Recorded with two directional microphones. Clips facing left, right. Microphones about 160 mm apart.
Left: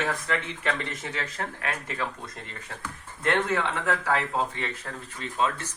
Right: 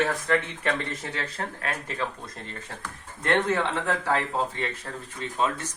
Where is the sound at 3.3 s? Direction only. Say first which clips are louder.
Right 1 dB; 25° right (ahead or behind).